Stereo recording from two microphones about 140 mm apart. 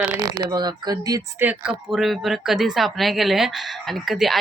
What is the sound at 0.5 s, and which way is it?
Speech, 30° right (ahead or behind).